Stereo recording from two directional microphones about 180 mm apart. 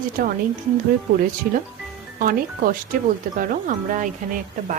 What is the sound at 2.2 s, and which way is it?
Speech, 50° right (ahead or behind).